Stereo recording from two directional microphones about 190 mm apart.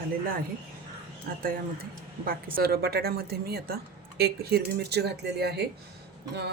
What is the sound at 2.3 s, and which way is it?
Speech, 50° right (ahead or behind).